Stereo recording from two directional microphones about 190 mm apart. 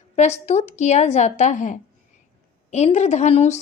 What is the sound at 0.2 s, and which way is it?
A woman's voice, 35° left (ahead or behind).